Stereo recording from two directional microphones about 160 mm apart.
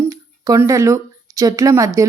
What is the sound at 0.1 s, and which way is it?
A woman's voice, 20° right (ahead or behind).